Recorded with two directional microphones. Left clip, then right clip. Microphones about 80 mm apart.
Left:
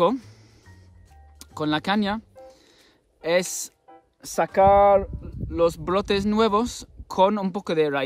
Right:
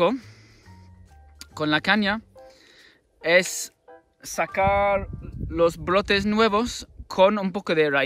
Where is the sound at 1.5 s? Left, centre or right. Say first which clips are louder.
Right 3 dB; left.